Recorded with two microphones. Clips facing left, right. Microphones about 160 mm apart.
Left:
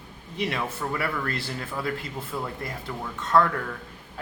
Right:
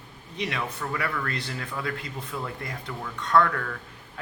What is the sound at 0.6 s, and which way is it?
A man's voice, 10° left (ahead or behind).